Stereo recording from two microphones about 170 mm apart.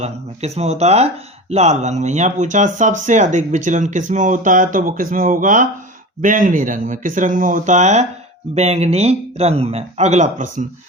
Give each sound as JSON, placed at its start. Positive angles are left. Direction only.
{"t": 0.0, "sound": "speech", "side_deg": -40}